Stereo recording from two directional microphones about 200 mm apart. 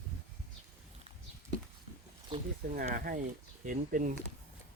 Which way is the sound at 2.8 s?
45° right (ahead or behind).